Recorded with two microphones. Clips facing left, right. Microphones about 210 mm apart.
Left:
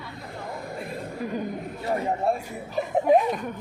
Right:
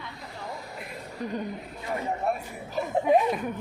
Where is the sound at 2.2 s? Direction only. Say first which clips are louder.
Left 3 dB; 30° left (ahead or behind).